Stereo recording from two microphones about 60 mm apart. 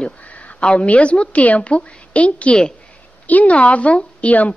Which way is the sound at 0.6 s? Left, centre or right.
Centre.